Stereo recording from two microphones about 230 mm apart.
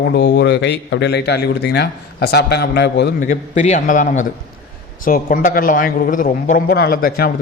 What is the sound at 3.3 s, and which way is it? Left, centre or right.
A man's voice, left.